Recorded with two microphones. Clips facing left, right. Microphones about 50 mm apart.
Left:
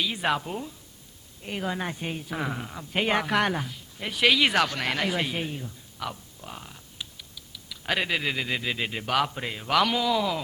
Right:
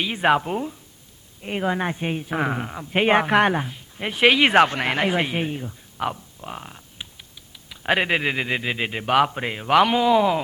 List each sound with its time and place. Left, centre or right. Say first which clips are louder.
0.0 s a woman's voice: right 7 dB; right